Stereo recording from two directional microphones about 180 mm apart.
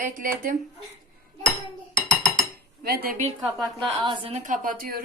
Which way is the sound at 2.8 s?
55° right (ahead or behind).